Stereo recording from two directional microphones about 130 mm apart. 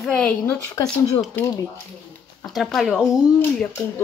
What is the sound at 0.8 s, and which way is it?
Speech, 25° left (ahead or behind).